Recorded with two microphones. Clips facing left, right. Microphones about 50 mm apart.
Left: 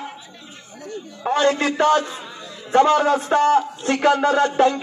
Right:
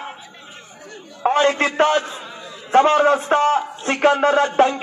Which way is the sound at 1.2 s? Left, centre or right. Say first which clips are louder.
Right 2 dB; right.